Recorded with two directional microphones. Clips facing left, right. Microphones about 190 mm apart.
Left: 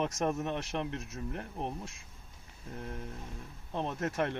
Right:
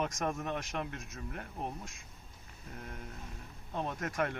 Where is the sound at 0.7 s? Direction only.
30° left (ahead or behind).